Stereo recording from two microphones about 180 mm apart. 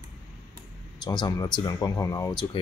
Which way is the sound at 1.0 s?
25° left (ahead or behind).